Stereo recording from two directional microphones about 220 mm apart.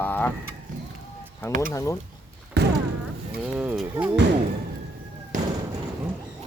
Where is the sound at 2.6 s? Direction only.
50° right (ahead or behind).